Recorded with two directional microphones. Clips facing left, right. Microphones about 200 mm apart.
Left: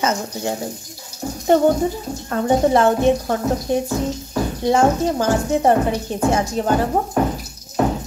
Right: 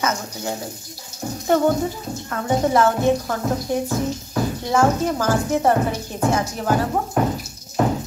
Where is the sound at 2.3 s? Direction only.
25° left (ahead or behind).